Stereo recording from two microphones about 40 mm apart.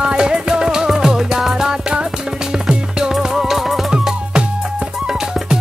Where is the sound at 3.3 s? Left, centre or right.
Centre.